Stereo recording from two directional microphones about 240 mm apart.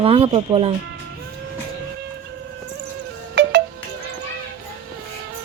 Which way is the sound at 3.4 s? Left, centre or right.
Right.